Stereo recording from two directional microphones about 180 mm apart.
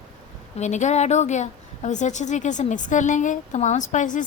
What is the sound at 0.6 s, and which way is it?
A woman's voice, 40° left (ahead or behind).